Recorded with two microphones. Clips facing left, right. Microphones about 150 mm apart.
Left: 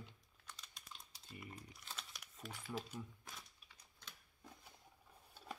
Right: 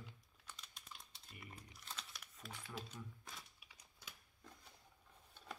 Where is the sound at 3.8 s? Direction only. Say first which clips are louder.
Even; 10° right (ahead or behind).